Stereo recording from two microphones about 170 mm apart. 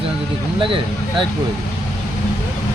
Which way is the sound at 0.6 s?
30° right (ahead or behind).